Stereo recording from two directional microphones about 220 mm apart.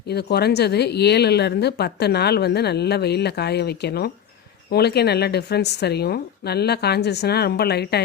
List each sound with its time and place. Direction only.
0.1 s a woman's voice: 50° left (ahead or behind)